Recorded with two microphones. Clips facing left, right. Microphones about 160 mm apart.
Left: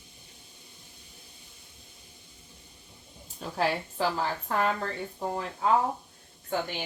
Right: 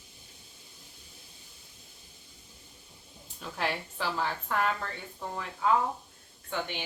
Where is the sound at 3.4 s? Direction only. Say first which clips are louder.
Left 5 dB; 40° left (ahead or behind).